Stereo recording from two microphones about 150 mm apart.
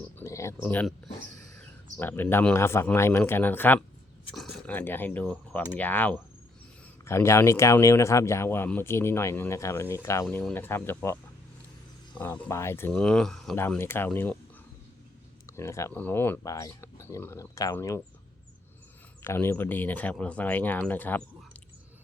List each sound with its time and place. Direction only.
0.2 s speech: 20° left (ahead or behind)
5.2 s speech: 5° right (ahead or behind)
5.5 s speech: 10° left (ahead or behind)
10.2 s speech: 10° left (ahead or behind)
12.9 s speech: 5° left (ahead or behind)
13.6 s speech: 15° left (ahead or behind)
15.4 s speech: 20° left (ahead or behind)
19.2 s speech: 15° left (ahead or behind)